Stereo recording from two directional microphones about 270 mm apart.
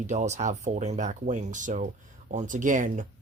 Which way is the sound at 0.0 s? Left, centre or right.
Right.